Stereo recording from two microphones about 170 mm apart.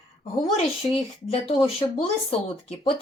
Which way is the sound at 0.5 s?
35° left (ahead or behind).